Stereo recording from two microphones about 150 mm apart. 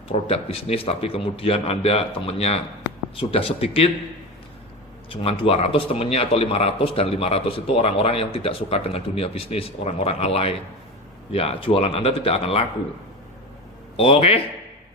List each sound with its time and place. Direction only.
0.1 s a man's voice: 40° left (ahead or behind)
5.0 s a man's voice: 35° left (ahead or behind)
13.9 s a man's voice: 40° left (ahead or behind)